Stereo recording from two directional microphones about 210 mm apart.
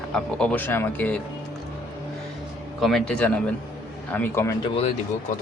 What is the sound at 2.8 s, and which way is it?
Speech, 5° left (ahead or behind).